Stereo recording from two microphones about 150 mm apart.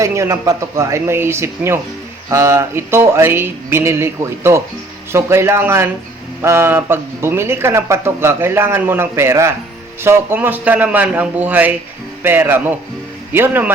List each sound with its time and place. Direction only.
0.0 s speech: 20° right (ahead or behind)